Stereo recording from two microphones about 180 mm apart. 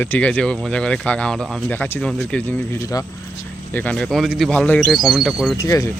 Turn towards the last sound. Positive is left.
turn(degrees=20)  # may be behind; listen again after turning